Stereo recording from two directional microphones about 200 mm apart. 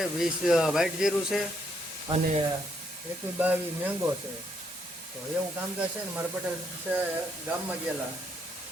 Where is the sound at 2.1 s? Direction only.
20° right (ahead or behind).